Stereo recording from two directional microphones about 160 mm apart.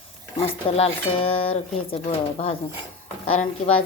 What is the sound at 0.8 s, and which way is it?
Cutlery, 35° left (ahead or behind).